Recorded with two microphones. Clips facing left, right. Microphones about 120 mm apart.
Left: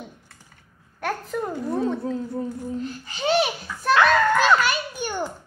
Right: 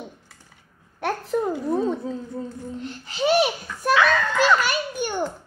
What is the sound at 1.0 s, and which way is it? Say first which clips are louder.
Speech: right 3 dB; 5° right (ahead or behind).